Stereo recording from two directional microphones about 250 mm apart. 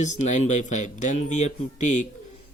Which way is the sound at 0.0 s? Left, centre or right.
Left.